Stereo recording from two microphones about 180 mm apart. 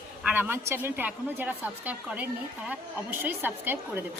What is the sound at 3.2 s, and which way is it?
Speech, 10° right (ahead or behind).